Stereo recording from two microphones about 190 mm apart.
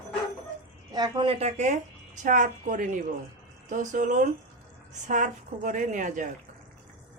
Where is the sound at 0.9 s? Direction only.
25° right (ahead or behind); by 6.3 s 40° right (ahead or behind).